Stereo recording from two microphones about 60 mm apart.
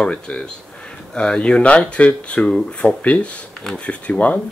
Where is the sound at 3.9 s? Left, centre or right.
Left.